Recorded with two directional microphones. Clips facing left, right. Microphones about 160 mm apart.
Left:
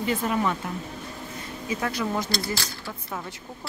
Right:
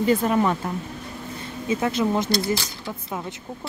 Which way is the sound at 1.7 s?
20° right (ahead or behind).